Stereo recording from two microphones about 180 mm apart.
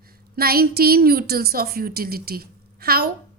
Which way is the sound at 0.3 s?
55° right (ahead or behind).